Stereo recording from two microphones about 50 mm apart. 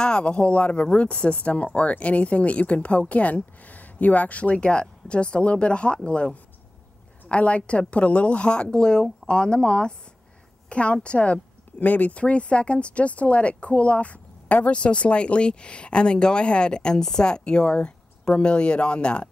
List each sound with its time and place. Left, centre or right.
0.0 s speech: left